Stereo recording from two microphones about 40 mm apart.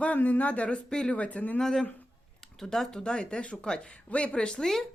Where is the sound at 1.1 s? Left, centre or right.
Left.